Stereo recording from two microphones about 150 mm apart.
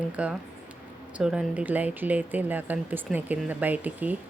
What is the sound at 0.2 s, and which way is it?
Speech, 10° right (ahead or behind).